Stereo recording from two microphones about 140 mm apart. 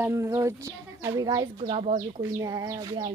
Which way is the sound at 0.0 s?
20° right (ahead or behind).